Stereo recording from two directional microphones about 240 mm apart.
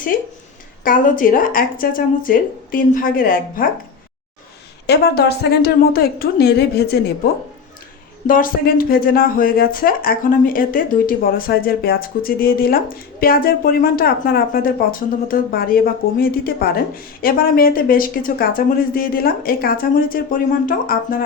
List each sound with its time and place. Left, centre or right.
0.1 s a sound: left
0.9 s speech: left
4.9 s speech: left
8.3 s speech: left